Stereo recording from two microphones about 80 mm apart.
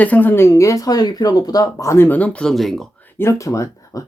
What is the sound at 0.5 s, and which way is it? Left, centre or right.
Speech, left.